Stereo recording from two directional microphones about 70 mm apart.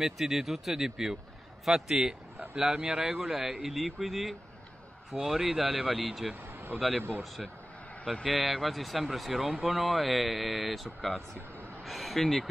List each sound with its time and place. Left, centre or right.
0.0 s speech: centre
6.4 s a sound: right
8.0 s a man's voice: centre